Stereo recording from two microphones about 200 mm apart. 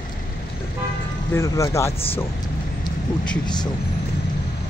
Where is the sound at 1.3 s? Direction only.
15° left (ahead or behind).